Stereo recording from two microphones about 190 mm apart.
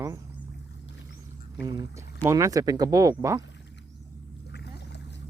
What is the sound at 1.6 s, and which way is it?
Speech, 20° right (ahead or behind).